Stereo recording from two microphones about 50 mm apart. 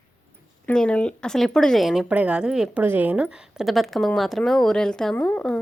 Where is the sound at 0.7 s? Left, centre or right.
Left.